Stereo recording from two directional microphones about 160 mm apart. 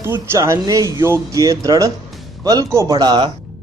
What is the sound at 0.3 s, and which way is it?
Speech, 20° right (ahead or behind).